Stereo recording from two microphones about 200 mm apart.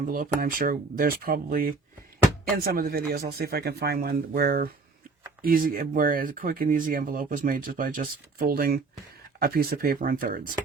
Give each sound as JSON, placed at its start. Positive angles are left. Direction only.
{"t": 0.0, "sound": "speech", "side_deg": -45}